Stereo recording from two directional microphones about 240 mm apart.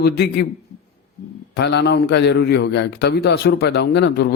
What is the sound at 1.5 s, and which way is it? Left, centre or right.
Speech, left.